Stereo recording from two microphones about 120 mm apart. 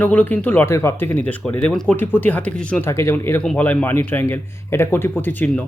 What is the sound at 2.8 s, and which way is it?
A man's voice, 20° left (ahead or behind).